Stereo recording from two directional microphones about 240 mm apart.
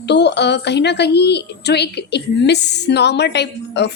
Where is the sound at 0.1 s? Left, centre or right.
Left.